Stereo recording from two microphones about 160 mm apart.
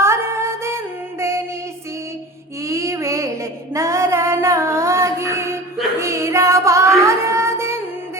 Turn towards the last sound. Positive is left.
turn(degrees=-15)  # may be behind; listen again after turning